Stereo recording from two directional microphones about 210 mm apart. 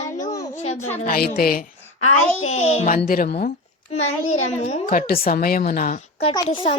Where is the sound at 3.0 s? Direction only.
45° left (ahead or behind).